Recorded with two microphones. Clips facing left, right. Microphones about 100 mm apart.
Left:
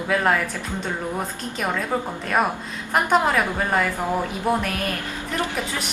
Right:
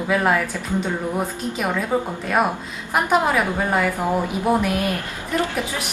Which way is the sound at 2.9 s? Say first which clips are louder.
Right 1 dB; 5° right (ahead or behind).